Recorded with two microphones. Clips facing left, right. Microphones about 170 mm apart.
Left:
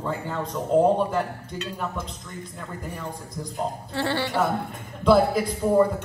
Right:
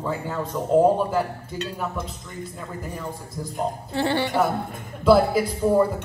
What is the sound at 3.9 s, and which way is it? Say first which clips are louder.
Speech: right 3 dB; 15° right (ahead or behind).